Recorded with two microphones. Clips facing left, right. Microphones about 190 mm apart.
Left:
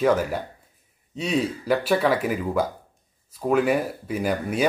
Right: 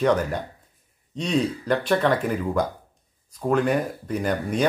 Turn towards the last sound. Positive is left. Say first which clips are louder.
# even
turn(degrees=5)  # may be behind; listen again after turning